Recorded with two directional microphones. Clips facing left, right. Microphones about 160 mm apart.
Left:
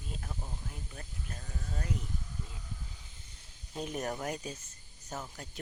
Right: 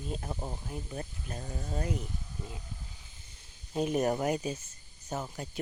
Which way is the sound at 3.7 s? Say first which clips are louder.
Right 8 dB; 15° right (ahead or behind).